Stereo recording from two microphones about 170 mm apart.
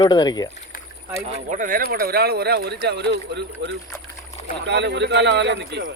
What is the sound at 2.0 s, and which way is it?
Speech, 65° right (ahead or behind).